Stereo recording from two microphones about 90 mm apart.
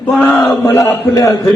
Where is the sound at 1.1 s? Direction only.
40° left (ahead or behind).